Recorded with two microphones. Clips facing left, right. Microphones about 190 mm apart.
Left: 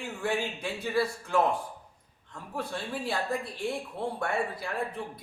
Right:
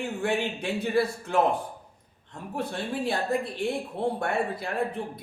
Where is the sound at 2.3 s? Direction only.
25° right (ahead or behind).